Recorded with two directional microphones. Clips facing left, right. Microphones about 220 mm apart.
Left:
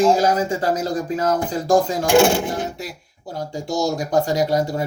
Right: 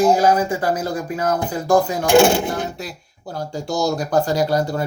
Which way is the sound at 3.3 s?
20° left (ahead or behind).